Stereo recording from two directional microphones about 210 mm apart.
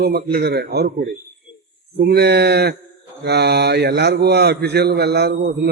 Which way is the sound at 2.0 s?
50° right (ahead or behind).